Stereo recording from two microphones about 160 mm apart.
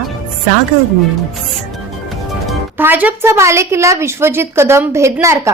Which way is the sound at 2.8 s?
10° right (ahead or behind).